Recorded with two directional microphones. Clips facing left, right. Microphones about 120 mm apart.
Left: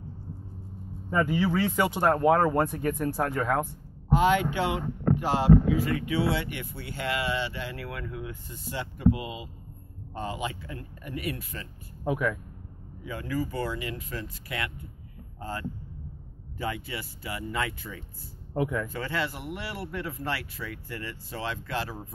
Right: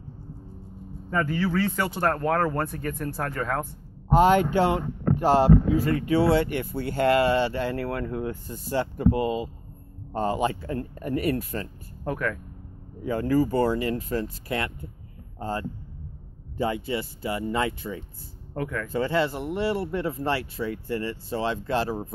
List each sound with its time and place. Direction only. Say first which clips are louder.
1.1 s speech: even; 15° left (ahead or behind)
4.1 s speech: right 5 dB; 40° right (ahead or behind)
12.0 s speech: left 1 dB; 10° left (ahead or behind)
13.0 s speech: right 9 dB; 40° right (ahead or behind)
18.5 s speech: left 2 dB; 15° left (ahead or behind)
18.9 s speech: right 7 dB; 25° right (ahead or behind)